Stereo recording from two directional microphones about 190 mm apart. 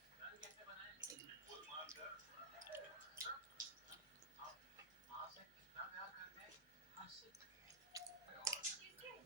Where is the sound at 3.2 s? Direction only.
15° right (ahead or behind).